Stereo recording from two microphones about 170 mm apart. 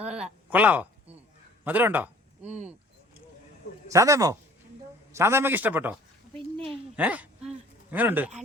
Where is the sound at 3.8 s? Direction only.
20° right (ahead or behind).